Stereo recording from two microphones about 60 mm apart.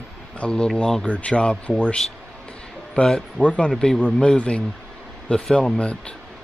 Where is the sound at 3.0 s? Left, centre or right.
Centre.